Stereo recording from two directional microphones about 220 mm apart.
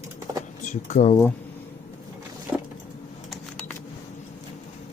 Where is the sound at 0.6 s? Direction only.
35° left (ahead or behind).